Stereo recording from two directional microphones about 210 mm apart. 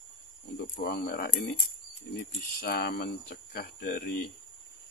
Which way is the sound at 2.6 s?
50° left (ahead or behind).